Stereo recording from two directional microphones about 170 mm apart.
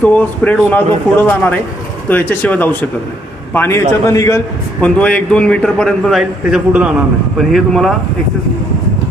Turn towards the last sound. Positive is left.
turn(degrees=0)  # may be behind; listen again after turning